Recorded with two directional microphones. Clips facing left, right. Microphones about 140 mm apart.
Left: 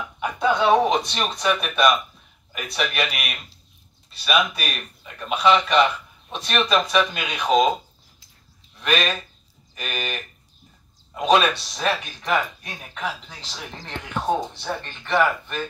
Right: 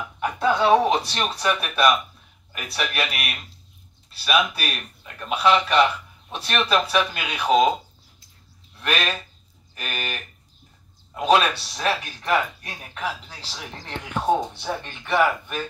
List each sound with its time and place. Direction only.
0.2 s speech: centre (ahead or behind)
8.7 s speech: 5° right (ahead or behind)